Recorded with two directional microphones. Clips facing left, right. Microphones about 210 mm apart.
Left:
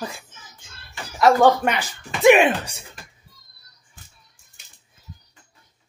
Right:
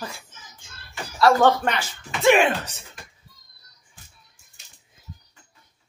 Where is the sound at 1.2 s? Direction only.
15° left (ahead or behind).